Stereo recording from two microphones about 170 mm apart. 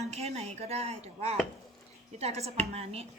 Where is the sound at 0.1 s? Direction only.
40° right (ahead or behind).